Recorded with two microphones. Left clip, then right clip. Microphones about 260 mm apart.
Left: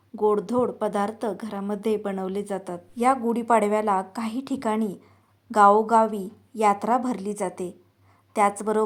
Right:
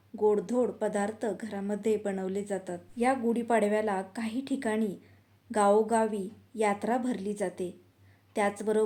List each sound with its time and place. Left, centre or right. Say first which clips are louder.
0.2 s a woman's voice: left 4 dB; centre